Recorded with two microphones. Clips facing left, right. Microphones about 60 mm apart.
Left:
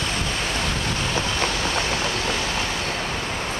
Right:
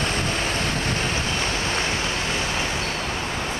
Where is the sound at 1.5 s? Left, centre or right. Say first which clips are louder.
Left 1 dB; right.